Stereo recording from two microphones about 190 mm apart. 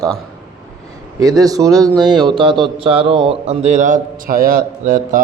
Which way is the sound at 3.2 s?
35° right (ahead or behind).